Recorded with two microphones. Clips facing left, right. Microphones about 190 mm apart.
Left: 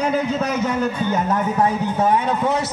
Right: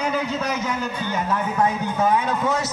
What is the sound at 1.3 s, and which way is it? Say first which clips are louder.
A man's voice: left 3 dB; 35° left (ahead or behind).